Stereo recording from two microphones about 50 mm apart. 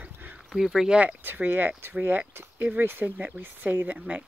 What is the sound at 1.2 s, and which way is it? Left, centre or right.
Speech, right.